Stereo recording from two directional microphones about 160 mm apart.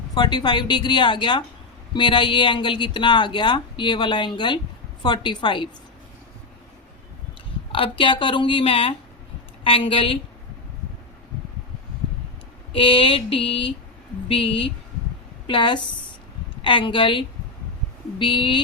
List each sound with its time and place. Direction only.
0.1 s speech: 25° left (ahead or behind)
7.7 s speech: 30° left (ahead or behind)
12.7 s speech: 35° left (ahead or behind)